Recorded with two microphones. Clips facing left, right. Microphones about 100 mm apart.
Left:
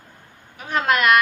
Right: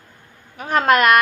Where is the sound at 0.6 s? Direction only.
45° right (ahead or behind).